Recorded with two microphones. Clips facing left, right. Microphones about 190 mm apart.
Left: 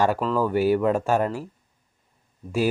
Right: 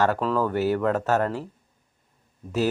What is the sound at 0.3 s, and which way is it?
Speech, 10° left (ahead or behind).